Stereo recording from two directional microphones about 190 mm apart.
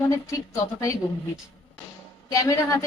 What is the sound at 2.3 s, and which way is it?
Speech, 15° left (ahead or behind).